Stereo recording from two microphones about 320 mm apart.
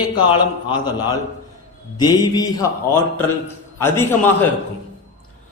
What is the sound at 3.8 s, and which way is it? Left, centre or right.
Speech, centre.